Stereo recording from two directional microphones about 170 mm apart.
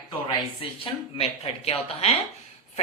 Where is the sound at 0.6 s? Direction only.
30° left (ahead or behind).